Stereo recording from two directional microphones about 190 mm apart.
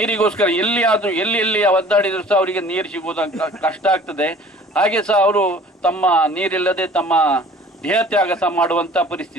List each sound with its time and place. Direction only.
0.0 s a man's voice: 5° left (ahead or behind)